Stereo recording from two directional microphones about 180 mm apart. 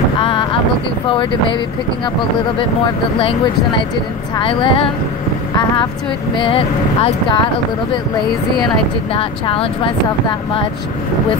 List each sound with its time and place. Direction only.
0.2 s a sound: 30° left (ahead or behind)
1.0 s speech: 30° left (ahead or behind)
3.2 s speech: 30° left (ahead or behind)
6.3 s speech: 30° left (ahead or behind)
9.1 s speech: 30° left (ahead or behind)